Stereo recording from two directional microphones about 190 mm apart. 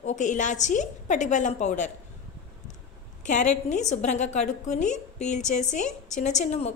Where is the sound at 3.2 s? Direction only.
40° left (ahead or behind).